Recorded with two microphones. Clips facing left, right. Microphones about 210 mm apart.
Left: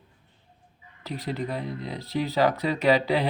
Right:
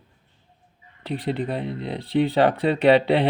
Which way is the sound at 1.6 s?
70° right (ahead or behind).